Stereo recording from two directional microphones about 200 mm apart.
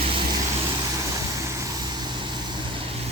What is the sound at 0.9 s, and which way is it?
Vehicle, 15° right (ahead or behind).